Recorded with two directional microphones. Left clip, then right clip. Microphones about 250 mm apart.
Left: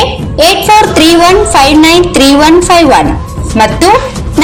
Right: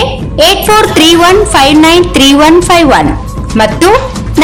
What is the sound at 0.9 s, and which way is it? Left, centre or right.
A woman's voice, centre.